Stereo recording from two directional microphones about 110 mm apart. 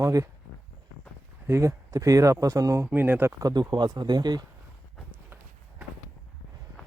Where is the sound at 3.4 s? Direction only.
35° right (ahead or behind).